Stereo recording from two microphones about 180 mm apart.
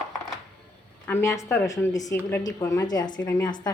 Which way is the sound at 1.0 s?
15° left (ahead or behind).